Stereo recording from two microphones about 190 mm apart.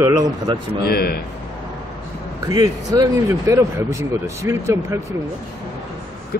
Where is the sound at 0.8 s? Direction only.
55° left (ahead or behind).